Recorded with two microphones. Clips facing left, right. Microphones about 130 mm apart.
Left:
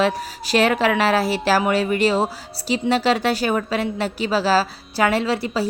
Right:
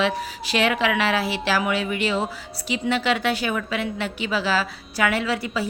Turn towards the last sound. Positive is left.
turn(degrees=35)  # may be behind; listen again after turning